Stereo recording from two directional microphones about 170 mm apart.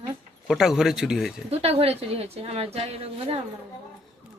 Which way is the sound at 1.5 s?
35° right (ahead or behind).